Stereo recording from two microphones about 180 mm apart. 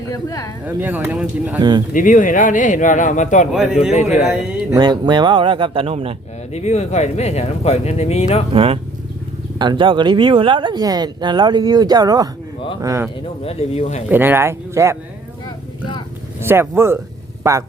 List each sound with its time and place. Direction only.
0.1 s speech: 20° left (ahead or behind)
0.6 s speech: 10° right (ahead or behind)
1.5 s speech: 25° right (ahead or behind)
1.9 s speech: 45° left (ahead or behind)
3.5 s a man's voice: 5° right (ahead or behind)
4.7 s speech: 25° right (ahead or behind)
6.5 s speech: 35° left (ahead or behind)
8.5 s speech: 30° right (ahead or behind)
13.4 s speech: 35° left (ahead or behind)
14.1 s speech: 10° right (ahead or behind)
16.4 s speech: 15° right (ahead or behind)